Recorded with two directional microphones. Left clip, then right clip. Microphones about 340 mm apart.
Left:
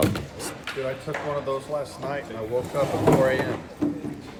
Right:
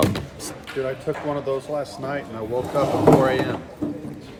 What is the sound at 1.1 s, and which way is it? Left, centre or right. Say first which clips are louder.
Speech: right 2 dB; right.